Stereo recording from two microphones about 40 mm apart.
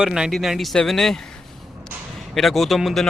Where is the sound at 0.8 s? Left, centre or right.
Centre.